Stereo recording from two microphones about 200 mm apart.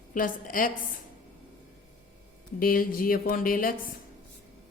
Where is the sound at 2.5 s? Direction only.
45° left (ahead or behind).